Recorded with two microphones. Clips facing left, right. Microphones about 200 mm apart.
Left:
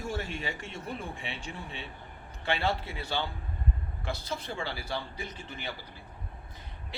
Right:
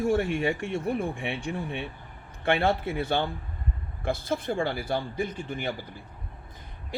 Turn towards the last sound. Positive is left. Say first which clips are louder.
# right 9 dB
turn(degrees=-50)  # may be behind; listen again after turning